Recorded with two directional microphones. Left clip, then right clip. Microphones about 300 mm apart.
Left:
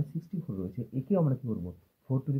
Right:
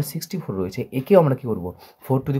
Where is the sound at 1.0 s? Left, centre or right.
Right.